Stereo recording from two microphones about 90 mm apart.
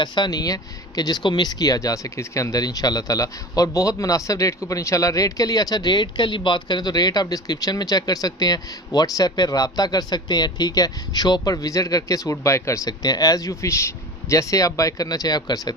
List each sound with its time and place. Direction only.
0.0 s speech: 50° left (ahead or behind)